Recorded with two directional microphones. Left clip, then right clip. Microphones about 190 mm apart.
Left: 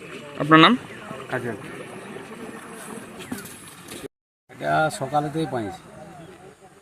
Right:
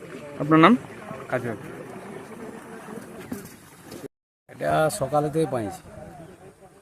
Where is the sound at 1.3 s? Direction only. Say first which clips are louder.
Right 1 dB; 20° right (ahead or behind).